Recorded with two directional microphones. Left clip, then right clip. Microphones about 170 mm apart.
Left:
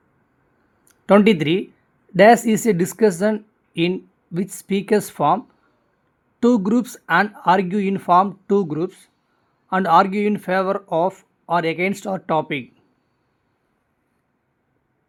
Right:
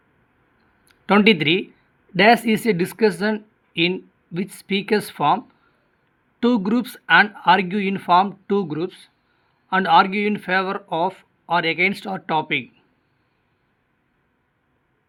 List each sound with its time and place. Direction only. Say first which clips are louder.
0.9 s speech: left 2 dB; 35° left (ahead or behind)
6.4 s speech: left 2 dB; 30° left (ahead or behind)